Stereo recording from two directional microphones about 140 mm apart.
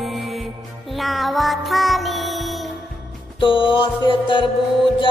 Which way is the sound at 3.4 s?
35° left (ahead or behind).